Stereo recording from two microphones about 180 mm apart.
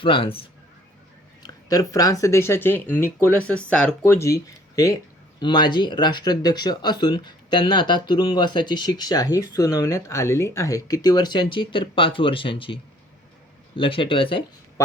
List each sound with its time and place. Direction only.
0.0 s speech: 30° left (ahead or behind)
14.8 s speech: 15° left (ahead or behind)